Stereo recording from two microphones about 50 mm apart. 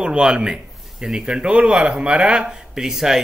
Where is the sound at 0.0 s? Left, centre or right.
Centre.